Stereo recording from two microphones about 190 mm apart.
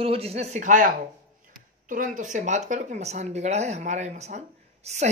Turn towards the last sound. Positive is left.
turn(degrees=-35)  # may be behind; listen again after turning